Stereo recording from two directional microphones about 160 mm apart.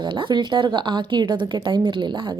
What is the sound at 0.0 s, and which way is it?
A woman's voice, 30° right (ahead or behind).